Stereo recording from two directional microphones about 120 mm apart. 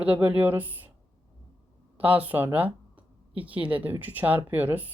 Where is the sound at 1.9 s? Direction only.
15° right (ahead or behind).